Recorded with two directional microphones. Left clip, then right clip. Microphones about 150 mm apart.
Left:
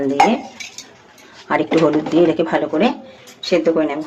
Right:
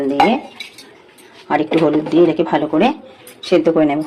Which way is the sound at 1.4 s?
Centre (ahead or behind).